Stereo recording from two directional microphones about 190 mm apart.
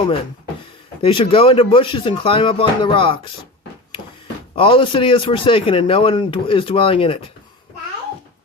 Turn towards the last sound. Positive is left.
turn(degrees=30)  # may be behind; listen again after turning